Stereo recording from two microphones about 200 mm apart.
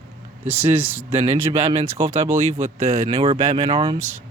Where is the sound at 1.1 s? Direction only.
25° right (ahead or behind).